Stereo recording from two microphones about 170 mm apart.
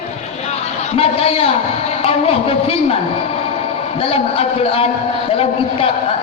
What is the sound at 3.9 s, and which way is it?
Music, 35° left (ahead or behind).